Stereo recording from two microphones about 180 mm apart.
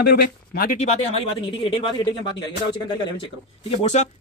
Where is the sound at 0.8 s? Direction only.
35° left (ahead or behind).